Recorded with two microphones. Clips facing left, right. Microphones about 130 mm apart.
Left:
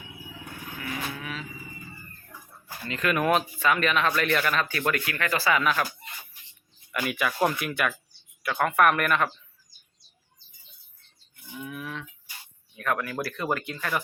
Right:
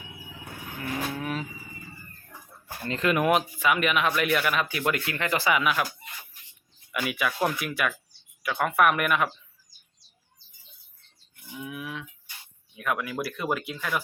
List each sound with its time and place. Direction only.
1.2 s vehicle: 45° right (ahead or behind)
2.9 s speech: 25° right (ahead or behind)
6.9 s speech: centre (ahead or behind)
11.5 s speech: 10° right (ahead or behind)